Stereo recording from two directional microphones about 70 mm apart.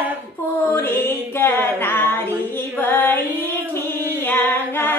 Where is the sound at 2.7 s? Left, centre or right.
Left.